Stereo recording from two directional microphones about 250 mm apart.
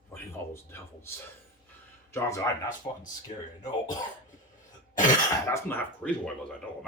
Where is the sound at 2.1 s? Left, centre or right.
Centre.